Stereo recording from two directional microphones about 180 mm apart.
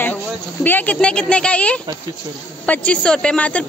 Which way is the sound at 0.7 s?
10° left (ahead or behind).